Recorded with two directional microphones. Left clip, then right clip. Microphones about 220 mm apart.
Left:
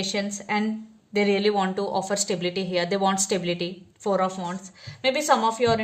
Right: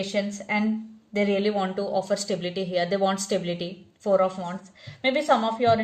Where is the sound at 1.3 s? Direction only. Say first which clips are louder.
Left 3 dB; 40° left (ahead or behind).